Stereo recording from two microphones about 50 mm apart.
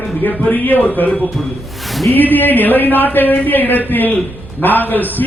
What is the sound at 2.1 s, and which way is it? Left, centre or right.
A man's voice, left.